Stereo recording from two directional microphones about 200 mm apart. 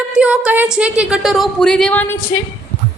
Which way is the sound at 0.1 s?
5° right (ahead or behind).